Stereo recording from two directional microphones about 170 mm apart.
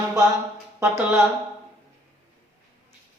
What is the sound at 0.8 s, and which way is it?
Mantra, 15° right (ahead or behind).